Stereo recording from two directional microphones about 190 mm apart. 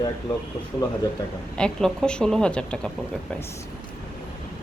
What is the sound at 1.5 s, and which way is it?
Speech, 5° left (ahead or behind).